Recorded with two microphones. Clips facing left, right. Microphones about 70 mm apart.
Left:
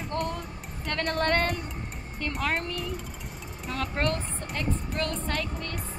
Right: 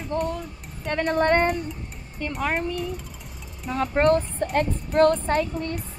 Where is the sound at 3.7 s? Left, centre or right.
Right.